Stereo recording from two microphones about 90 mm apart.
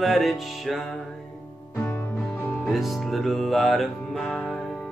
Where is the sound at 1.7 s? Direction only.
25° left (ahead or behind).